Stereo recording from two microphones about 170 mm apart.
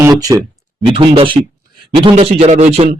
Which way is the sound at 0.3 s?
25° right (ahead or behind).